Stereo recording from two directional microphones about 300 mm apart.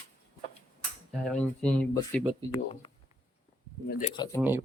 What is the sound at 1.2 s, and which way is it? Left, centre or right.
Speech, centre.